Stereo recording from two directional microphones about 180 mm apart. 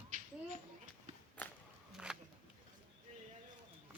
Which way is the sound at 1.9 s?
5° right (ahead or behind).